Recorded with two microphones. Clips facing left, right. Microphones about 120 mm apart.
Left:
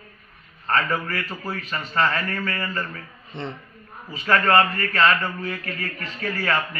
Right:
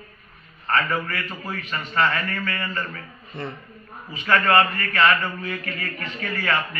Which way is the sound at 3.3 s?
25° left (ahead or behind).